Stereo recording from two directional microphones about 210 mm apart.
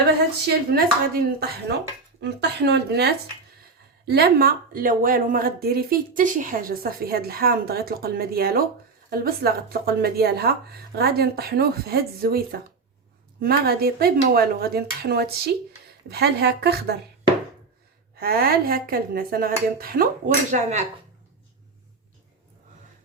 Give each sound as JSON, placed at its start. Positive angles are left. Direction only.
{"t": 0.4, "sound": "speech", "side_deg": -45}
{"t": 18.2, "sound": "speech", "side_deg": -45}